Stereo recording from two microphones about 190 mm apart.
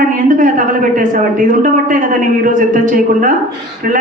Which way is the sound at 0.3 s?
45° right (ahead or behind).